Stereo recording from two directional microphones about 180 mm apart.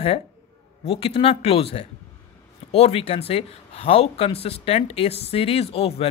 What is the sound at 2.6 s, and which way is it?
Speech, 35° left (ahead or behind).